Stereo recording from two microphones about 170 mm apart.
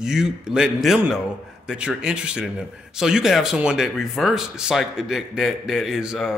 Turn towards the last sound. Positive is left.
turn(degrees=-5)  # may be behind; listen again after turning